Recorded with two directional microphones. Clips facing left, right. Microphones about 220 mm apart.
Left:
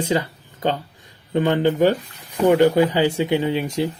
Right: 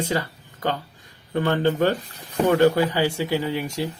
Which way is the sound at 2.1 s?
35° right (ahead or behind).